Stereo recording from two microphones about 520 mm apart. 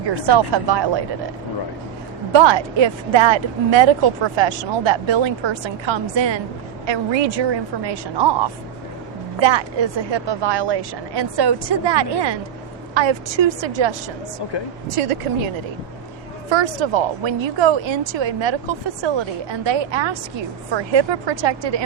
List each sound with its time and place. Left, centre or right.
0.2 s a woman's voice: right
2.3 s a woman's voice: right
14.8 s speech: right
16.5 s a woman's voice: right